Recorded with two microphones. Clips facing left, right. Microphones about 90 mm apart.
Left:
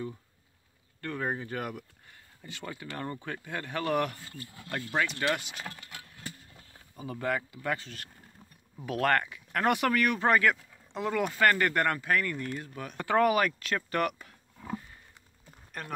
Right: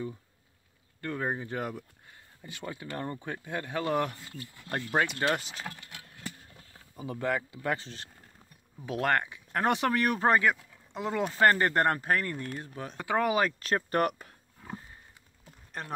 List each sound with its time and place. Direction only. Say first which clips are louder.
1.0 s speech: right 1 dB; 10° right (ahead or behind)
4.6 s speech: right 2 dB; 35° right (ahead or behind)
7.0 s speech: right 1 dB; 15° right (ahead or behind)
7.5 s speech: right 1 dB; 25° right (ahead or behind)
10.4 s speech: left 1 dB; 15° right (ahead or behind)
11.2 s speech: right 3 dB; 30° right (ahead or behind)
12.9 s speech: left 3 dB; 15° right (ahead or behind)
13.6 s speech: right 2 dB; 35° right (ahead or behind)
15.8 s speech: right 1 dB; 30° right (ahead or behind)